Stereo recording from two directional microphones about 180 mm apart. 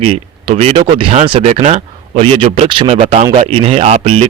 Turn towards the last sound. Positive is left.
turn(degrees=-35)  # may be behind; listen again after turning